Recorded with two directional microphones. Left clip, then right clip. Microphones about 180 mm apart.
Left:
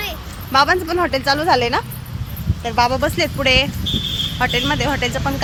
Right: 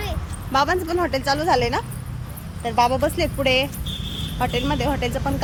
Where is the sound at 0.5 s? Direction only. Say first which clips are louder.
Left 5 dB; 20° left (ahead or behind).